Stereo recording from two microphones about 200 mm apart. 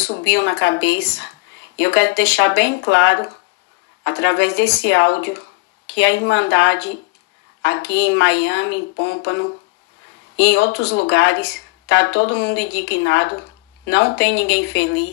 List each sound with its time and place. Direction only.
0.1 s speech: 65° left (ahead or behind)